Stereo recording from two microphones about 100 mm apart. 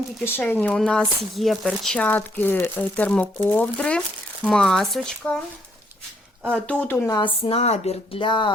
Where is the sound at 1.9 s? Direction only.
15° left (ahead or behind).